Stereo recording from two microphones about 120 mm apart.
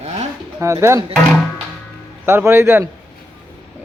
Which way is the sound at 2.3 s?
20° right (ahead or behind).